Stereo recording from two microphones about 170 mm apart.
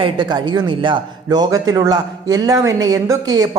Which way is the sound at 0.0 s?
25° right (ahead or behind).